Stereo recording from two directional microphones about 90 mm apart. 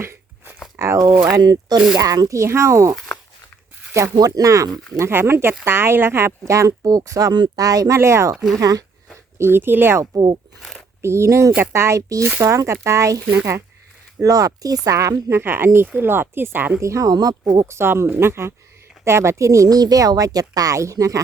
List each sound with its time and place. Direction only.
0.0 s a sound: 30° right (ahead or behind)
0.8 s speech: 35° right (ahead or behind)
1.3 s speech: 50° right (ahead or behind); by 2.9 s 35° right (ahead or behind)
4.4 s speech: 40° right (ahead or behind)
4.9 s speech: 30° right (ahead or behind)
9.4 s speech: 25° right (ahead or behind)
10.0 s speech: 55° right (ahead or behind)
11.0 s speech: 30° right (ahead or behind)
15.4 s speech: 25° right (ahead or behind)
16.8 s speech: 35° right (ahead or behind)
17.7 s speech: 30° right (ahead or behind)